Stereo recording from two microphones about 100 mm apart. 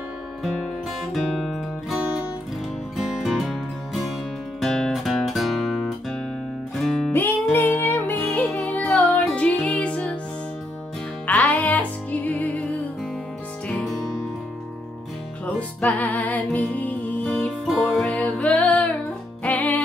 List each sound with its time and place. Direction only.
1.1 s music: 5° left (ahead or behind)
7.5 s music: 20° left (ahead or behind)
11.2 s music: 15° left (ahead or behind)
13.7 s music: 10° left (ahead or behind)
15.4 s music: 15° left (ahead or behind)